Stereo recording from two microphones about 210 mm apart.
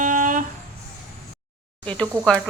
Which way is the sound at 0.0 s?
40° right (ahead or behind).